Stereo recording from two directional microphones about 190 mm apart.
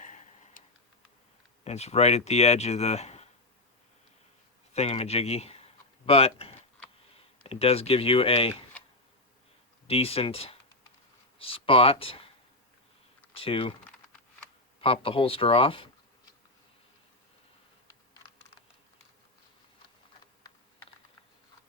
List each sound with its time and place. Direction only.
0.0 s tick-tock: 40° left (ahead or behind)
1.6 s speech: 35° left (ahead or behind)
4.7 s speech: 35° left (ahead or behind)
9.8 s speech: 30° left (ahead or behind)
13.3 s speech: 30° left (ahead or behind)
14.8 s speech: 30° left (ahead or behind)